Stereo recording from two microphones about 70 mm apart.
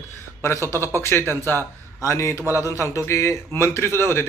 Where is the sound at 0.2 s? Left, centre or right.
Left.